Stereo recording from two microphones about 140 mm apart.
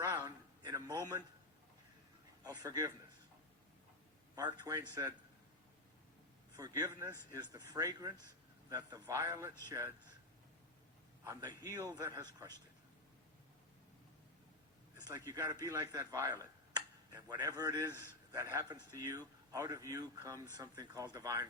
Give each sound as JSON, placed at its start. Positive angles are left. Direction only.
{"t": 0.0, "sound": "a sound", "side_deg": -20}
{"t": 2.4, "sound": "speech", "side_deg": -30}
{"t": 4.4, "sound": "a man's voice", "side_deg": -25}
{"t": 6.6, "sound": "a man's voice", "side_deg": -25}
{"t": 11.2, "sound": "a man's voice", "side_deg": -25}
{"t": 15.3, "sound": "a man's voice", "side_deg": -25}